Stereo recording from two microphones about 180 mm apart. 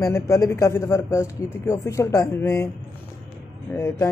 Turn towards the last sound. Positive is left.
turn(degrees=15)  # may be behind; listen again after turning